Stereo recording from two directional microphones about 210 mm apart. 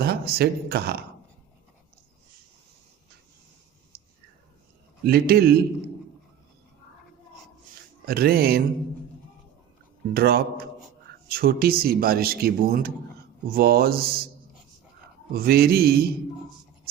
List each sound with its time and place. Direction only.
0.0 s speech: 50° right (ahead or behind)
5.0 s speech: 50° right (ahead or behind)
8.0 s speech: 45° right (ahead or behind)
10.2 s speech: 45° right (ahead or behind)
15.3 s speech: 45° right (ahead or behind)